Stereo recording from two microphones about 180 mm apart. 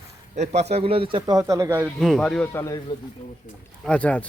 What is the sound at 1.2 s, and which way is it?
Speech, 20° right (ahead or behind).